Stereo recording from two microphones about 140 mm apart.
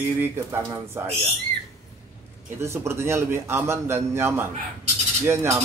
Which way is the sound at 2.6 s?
20° right (ahead or behind).